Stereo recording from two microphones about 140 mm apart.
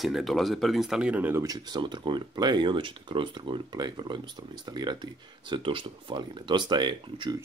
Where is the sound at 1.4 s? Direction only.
30° right (ahead or behind).